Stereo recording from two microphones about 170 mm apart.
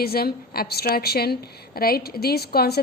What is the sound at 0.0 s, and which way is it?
A woman's voice, 65° left (ahead or behind).